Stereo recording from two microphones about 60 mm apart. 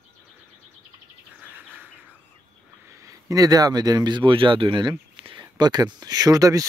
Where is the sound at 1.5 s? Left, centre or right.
Right.